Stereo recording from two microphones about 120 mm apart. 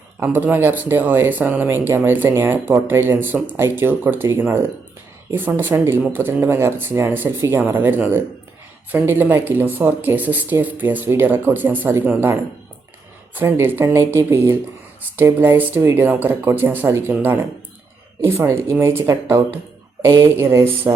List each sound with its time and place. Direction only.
0.2 s speech: 20° right (ahead or behind)